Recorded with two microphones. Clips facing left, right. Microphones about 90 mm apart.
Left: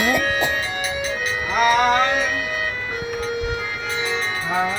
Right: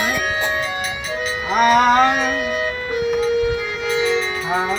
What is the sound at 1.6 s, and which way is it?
Music, 45° right (ahead or behind).